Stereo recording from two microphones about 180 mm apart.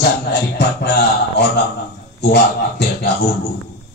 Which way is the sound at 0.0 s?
70° left (ahead or behind).